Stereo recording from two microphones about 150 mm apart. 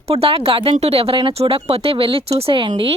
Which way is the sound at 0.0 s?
40° right (ahead or behind).